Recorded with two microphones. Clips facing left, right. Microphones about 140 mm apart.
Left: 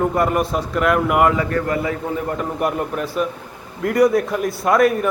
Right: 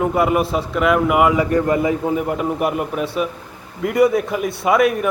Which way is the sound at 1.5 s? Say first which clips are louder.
Right 4 dB; 20° right (ahead or behind).